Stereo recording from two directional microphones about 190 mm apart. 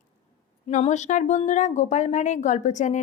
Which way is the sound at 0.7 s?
40° left (ahead or behind).